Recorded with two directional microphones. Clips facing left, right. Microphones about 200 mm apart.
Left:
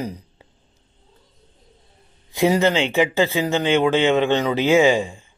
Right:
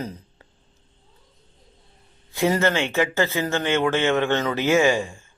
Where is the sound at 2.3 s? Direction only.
15° left (ahead or behind).